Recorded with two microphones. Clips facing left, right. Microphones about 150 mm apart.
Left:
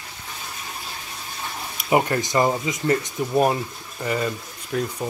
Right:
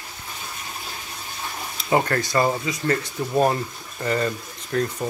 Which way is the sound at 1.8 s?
15° left (ahead or behind).